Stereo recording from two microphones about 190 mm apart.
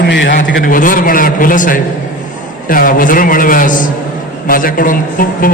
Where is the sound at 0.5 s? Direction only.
45° left (ahead or behind).